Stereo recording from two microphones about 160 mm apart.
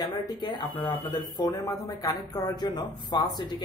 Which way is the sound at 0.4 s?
30° left (ahead or behind).